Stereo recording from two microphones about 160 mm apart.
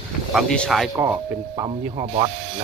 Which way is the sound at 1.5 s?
30° right (ahead or behind).